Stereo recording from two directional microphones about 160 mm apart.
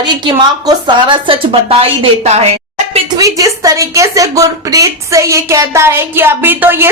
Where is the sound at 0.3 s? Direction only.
30° right (ahead or behind).